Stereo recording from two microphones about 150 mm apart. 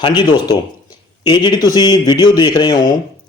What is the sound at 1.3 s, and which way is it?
Speech, 30° left (ahead or behind).